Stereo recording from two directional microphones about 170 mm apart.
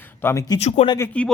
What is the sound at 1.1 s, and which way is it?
Speech, 5° left (ahead or behind).